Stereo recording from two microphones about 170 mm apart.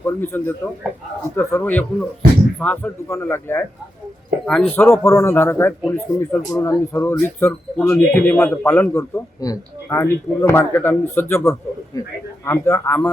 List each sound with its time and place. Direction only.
0.0 s speech: 10° left (ahead or behind)